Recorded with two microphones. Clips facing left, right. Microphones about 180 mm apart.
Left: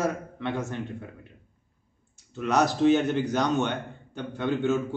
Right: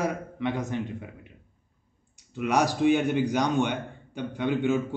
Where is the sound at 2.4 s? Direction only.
10° right (ahead or behind).